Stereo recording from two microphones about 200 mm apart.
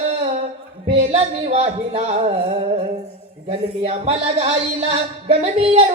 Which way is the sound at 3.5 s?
35° right (ahead or behind).